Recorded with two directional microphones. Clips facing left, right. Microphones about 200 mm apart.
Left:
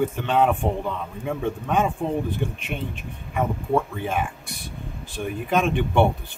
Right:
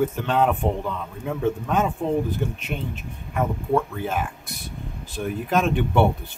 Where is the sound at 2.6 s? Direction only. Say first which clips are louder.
Even; 40° right (ahead or behind).